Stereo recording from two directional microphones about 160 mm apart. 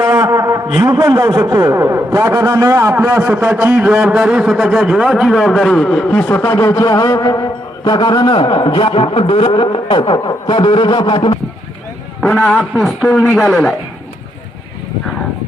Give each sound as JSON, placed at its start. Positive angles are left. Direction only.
{"t": 0.0, "sound": "a sound", "side_deg": -20}
{"t": 1.6, "sound": "a man's voice", "side_deg": -20}
{"t": 12.2, "sound": "a man's voice", "side_deg": 0}